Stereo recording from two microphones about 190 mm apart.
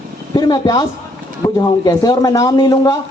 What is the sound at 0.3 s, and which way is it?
Speech, 25° left (ahead or behind).